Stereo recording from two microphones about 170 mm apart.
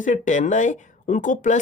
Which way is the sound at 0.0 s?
45° left (ahead or behind).